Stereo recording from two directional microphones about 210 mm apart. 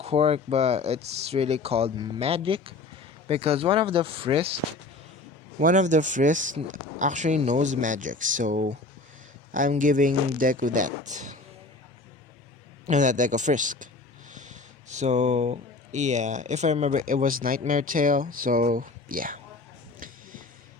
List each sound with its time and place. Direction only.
0.0 s speech: 30° right (ahead or behind)
5.5 s speech: 35° right (ahead or behind)
12.9 s speech: 35° right (ahead or behind)